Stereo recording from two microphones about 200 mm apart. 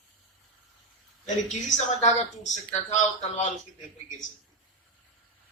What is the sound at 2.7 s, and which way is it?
Speech, 35° left (ahead or behind).